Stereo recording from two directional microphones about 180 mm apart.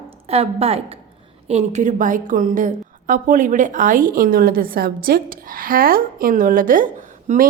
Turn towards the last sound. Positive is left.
turn(degrees=-40)  # may be behind; listen again after turning